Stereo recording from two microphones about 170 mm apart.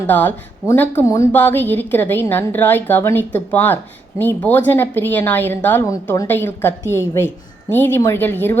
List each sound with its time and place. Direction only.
0.1 s a woman's voice: 10° left (ahead or behind)